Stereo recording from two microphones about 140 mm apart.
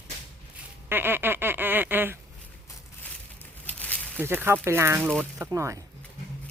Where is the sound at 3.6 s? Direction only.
10° left (ahead or behind).